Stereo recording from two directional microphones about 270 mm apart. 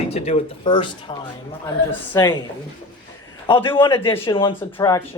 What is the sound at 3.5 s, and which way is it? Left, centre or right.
Speech, centre.